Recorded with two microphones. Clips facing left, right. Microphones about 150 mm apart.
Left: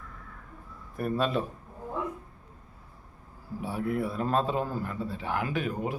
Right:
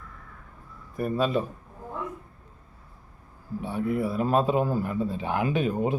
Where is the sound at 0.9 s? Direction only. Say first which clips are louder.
Right 3 dB; centre (ahead or behind).